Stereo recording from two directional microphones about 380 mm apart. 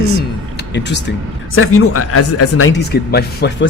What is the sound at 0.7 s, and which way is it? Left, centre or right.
Speech, left.